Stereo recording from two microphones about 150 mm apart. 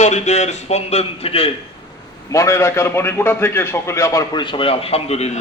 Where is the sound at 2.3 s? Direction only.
20° left (ahead or behind).